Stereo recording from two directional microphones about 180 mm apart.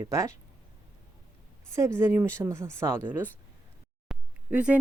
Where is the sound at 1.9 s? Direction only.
15° right (ahead or behind).